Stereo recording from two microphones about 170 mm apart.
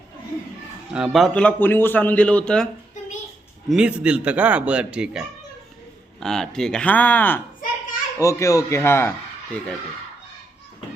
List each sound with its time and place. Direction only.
0.9 s a man's voice: centre (ahead or behind)
3.7 s a man's voice: 5° right (ahead or behind); by 9.1 s 15° left (ahead or behind)